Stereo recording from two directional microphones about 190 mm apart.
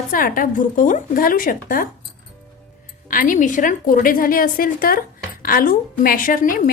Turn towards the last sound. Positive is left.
turn(degrees=50)  # may be behind; listen again after turning